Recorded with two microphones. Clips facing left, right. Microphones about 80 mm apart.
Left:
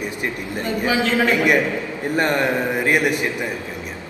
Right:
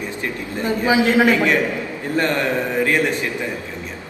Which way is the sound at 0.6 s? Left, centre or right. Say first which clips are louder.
Right 4 dB; right.